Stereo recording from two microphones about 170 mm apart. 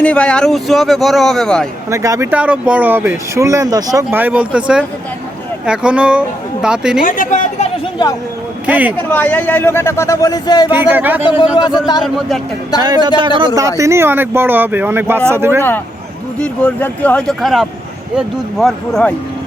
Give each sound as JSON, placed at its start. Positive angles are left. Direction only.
{"t": 0.0, "sound": "speech", "side_deg": 5}
{"t": 1.9, "sound": "speech", "side_deg": -20}
{"t": 7.0, "sound": "a woman's voice", "side_deg": 50}
{"t": 8.6, "sound": "speech", "side_deg": -10}
{"t": 9.1, "sound": "a man's voice", "side_deg": 10}
{"t": 10.7, "sound": "speech", "side_deg": -10}
{"t": 11.5, "sound": "a man's voice", "side_deg": 25}
{"t": 12.0, "sound": "speech", "side_deg": 0}
{"t": 12.8, "sound": "speech", "side_deg": -25}
{"t": 13.6, "sound": "speech", "side_deg": -20}
{"t": 16.4, "sound": "speech", "side_deg": 10}